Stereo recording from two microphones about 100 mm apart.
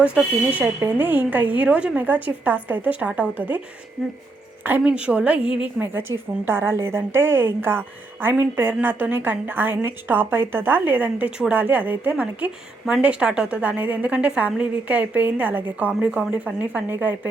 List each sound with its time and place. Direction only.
0.0 s a woman's voice: 15° right (ahead or behind)
4.8 s a woman's voice: 10° right (ahead or behind)